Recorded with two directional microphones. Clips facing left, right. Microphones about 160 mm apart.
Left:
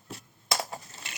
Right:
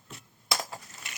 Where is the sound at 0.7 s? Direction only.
30° left (ahead or behind).